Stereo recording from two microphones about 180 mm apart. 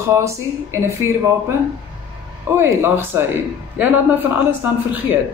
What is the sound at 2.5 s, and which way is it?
Speech, 15° right (ahead or behind).